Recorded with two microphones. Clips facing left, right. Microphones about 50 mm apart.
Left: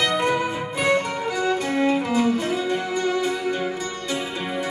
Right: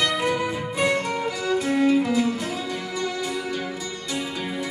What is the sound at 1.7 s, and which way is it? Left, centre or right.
Music, left.